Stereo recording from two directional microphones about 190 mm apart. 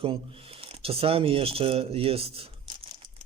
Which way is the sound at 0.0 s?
30° right (ahead or behind).